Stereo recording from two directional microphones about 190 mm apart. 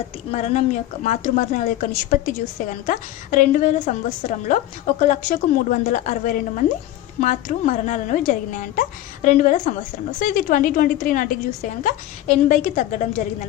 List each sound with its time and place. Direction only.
0.3 s a woman's voice: 35° left (ahead or behind)